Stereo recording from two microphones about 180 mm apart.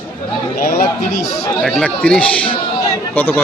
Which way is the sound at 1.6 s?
5° left (ahead or behind).